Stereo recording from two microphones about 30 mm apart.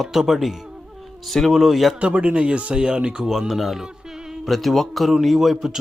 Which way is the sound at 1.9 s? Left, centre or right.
Right.